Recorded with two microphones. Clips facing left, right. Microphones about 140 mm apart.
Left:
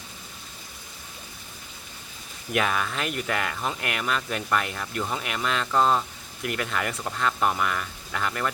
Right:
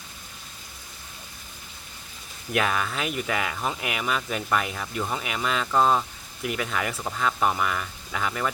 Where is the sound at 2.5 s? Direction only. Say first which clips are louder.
Even; centre (ahead or behind).